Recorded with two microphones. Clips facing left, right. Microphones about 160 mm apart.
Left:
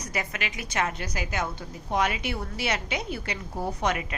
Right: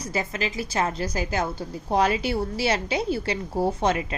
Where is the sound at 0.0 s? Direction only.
30° right (ahead or behind).